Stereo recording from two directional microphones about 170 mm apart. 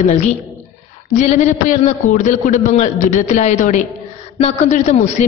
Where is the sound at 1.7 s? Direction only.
50° left (ahead or behind).